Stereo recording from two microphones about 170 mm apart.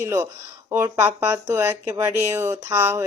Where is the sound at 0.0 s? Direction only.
15° right (ahead or behind).